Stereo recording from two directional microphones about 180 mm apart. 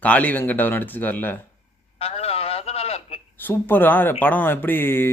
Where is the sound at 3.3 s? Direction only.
10° left (ahead or behind).